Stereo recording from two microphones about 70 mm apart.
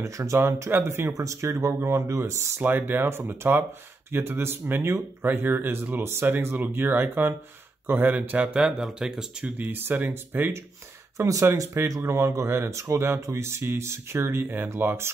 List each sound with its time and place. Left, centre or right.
0.0 s speech: right
1.1 s speech: right
2.6 s speech: right
8.5 s speech: centre
9.6 s speech: right
11.1 s speech: right